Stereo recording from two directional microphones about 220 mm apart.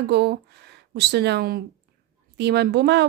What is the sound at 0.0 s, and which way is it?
A woman's voice, 50° right (ahead or behind).